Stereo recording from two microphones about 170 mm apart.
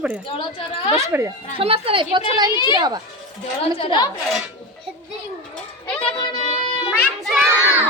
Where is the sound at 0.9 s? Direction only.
15° right (ahead or behind).